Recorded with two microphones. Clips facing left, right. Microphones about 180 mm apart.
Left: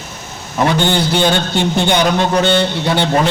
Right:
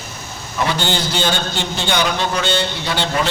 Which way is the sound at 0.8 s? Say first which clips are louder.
Left 6 dB; 55° left (ahead or behind).